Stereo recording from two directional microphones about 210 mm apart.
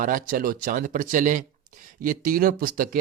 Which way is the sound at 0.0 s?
40° right (ahead or behind).